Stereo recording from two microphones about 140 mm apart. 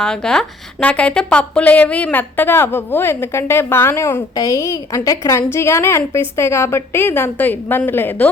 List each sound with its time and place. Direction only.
0.0 s a woman's voice: 5° left (ahead or behind)